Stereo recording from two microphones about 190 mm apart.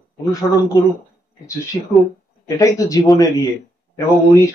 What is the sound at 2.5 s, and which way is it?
Speech, 15° left (ahead or behind).